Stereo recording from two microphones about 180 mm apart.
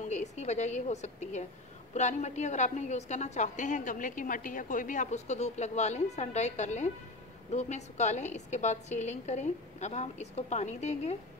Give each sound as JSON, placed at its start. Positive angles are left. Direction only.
{"t": 0.0, "sound": "a woman's voice", "side_deg": 40}